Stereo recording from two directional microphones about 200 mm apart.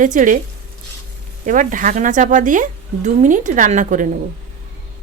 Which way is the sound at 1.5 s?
40° right (ahead or behind).